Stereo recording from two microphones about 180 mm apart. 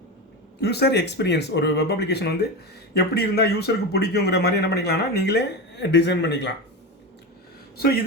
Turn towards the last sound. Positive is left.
turn(degrees=60)  # may be behind; listen again after turning